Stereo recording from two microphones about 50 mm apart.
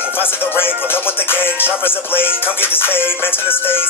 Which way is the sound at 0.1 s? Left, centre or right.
Left.